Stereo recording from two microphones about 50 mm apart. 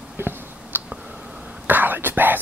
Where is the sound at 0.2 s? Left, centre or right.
Right.